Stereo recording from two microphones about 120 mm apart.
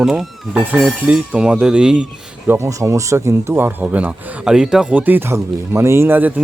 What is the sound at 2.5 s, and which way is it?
Speech, 25° right (ahead or behind).